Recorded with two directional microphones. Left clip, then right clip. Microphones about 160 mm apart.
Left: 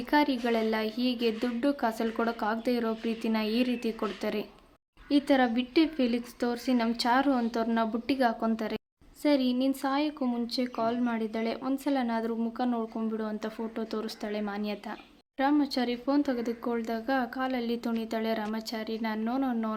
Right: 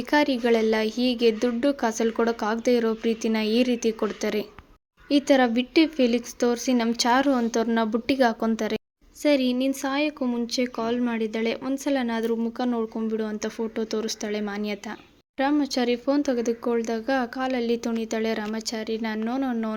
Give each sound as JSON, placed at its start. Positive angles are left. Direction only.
{"t": 0.0, "sound": "speech", "side_deg": -25}